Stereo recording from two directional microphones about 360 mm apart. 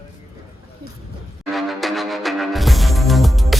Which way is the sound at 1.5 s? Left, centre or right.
Centre.